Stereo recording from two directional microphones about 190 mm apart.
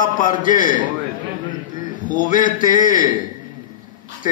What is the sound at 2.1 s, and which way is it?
A man's voice, 45° left (ahead or behind).